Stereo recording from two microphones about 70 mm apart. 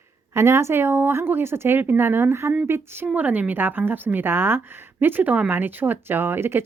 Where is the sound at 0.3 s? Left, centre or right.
Right.